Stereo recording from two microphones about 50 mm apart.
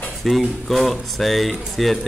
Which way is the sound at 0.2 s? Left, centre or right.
Centre.